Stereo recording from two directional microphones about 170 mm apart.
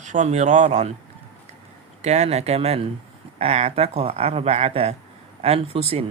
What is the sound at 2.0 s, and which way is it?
Speech, 40° right (ahead or behind).